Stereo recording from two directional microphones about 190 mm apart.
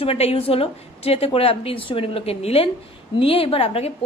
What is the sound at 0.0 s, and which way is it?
A woman's voice, 30° left (ahead or behind).